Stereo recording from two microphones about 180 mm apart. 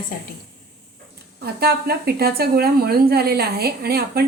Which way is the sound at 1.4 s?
60° right (ahead or behind).